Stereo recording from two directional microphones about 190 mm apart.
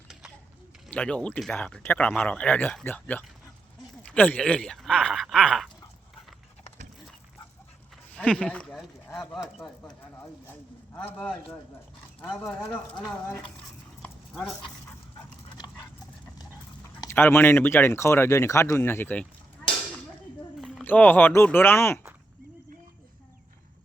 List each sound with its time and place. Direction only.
0.9 s speech: 5° left (ahead or behind)
8.1 s speech: 5° left (ahead or behind)
10.9 s speech: 5° left (ahead or behind)
14.0 s dog: 5° left (ahead or behind)
15.4 s dog: 20° left (ahead or behind)
17.0 s speech: 10° left (ahead or behind)
20.6 s a sound: centre (ahead or behind)
20.8 s speech: 10° left (ahead or behind)